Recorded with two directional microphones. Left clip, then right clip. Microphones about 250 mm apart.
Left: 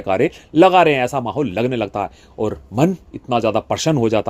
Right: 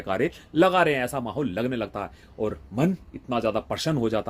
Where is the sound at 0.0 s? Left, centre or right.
Left.